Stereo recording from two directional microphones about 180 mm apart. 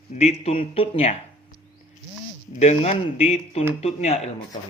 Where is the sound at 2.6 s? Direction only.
35° left (ahead or behind).